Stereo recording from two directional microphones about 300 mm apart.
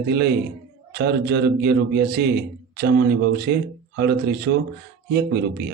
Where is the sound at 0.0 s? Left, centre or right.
Right.